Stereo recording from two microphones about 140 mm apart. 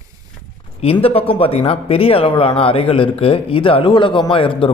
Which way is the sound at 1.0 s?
45° left (ahead or behind).